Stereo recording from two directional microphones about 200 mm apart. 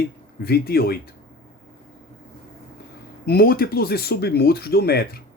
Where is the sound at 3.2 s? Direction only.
50° left (ahead or behind).